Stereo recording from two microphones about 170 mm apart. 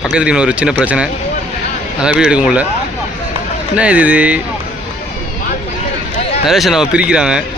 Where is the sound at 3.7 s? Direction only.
5° right (ahead or behind).